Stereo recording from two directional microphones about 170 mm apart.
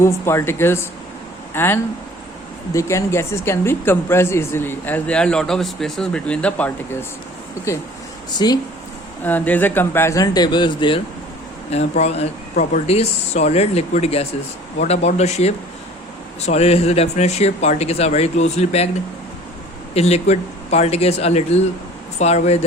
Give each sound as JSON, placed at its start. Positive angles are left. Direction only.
{"t": 0.0, "sound": "speech", "side_deg": 15}
{"t": 8.4, "sound": "speech", "side_deg": 25}
{"t": 9.2, "sound": "speech", "side_deg": 10}
{"t": 11.7, "sound": "speech", "side_deg": 40}
{"t": 19.9, "sound": "speech", "side_deg": 35}